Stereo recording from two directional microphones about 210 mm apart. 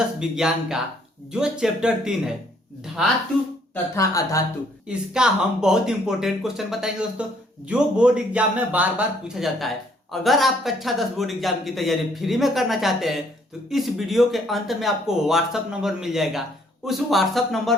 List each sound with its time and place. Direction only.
0.2 s speech: 5° right (ahead or behind)
3.9 s speech: 15° left (ahead or behind)
4.9 s speech: 5° right (ahead or behind)